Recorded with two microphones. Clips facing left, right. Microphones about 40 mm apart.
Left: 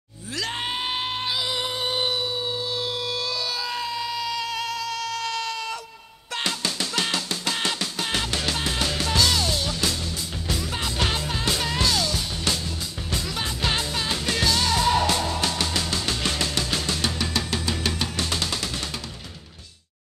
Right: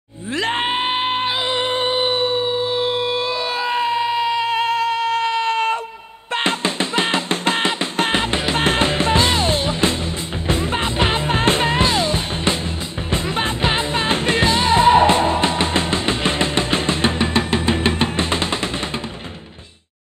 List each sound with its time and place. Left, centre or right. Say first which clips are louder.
0.4 s music: right 8 dB; right